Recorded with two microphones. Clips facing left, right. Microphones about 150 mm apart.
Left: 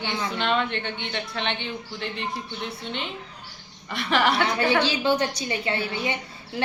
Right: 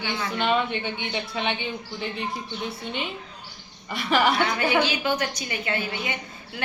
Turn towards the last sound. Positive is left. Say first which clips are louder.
# left 3 dB
turn(degrees=30)  # may be behind; listen again after turning